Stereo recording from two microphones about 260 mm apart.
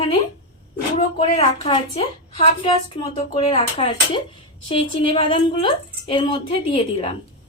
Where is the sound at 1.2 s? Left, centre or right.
Left.